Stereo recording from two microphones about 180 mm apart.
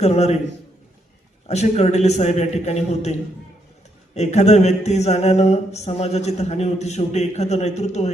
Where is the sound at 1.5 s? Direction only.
35° left (ahead or behind).